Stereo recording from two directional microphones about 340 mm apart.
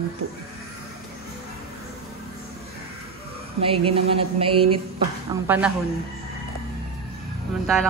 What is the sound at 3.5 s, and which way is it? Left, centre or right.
Speech, centre.